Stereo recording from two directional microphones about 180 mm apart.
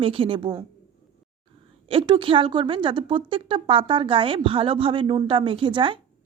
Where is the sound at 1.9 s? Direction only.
30° right (ahead or behind).